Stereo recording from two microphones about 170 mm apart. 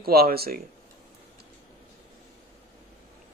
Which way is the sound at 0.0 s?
65° right (ahead or behind).